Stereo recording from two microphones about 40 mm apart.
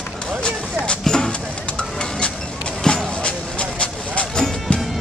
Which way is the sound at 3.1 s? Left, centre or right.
Left.